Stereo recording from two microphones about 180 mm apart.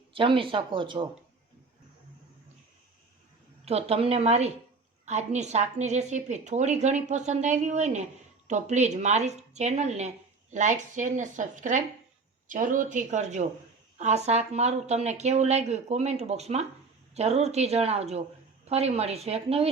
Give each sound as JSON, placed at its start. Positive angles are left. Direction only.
{"t": 0.1, "sound": "speech", "side_deg": -30}
{"t": 3.7, "sound": "a woman's voice", "side_deg": -35}